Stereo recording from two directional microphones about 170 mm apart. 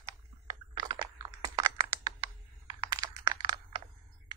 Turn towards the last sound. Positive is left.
turn(degrees=-20)  # may be behind; listen again after turning